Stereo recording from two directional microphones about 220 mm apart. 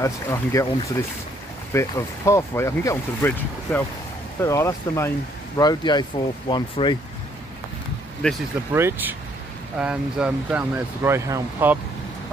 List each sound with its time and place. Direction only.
0.0 s speech: 15° left (ahead or behind)
1.7 s speech: 15° left (ahead or behind)
8.2 s speech: 5° left (ahead or behind)
8.7 s speech: 10° right (ahead or behind)